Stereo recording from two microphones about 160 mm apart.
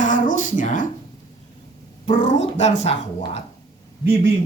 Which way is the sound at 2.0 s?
50° left (ahead or behind).